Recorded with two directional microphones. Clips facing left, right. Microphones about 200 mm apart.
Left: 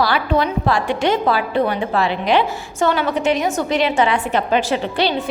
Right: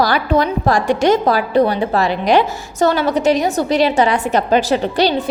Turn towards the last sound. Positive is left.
turn(degrees=-40)  # may be behind; listen again after turning